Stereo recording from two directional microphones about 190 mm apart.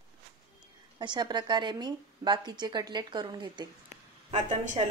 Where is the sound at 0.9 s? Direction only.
25° right (ahead or behind).